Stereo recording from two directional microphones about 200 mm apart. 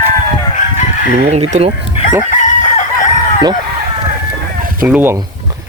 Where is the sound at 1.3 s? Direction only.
30° right (ahead or behind).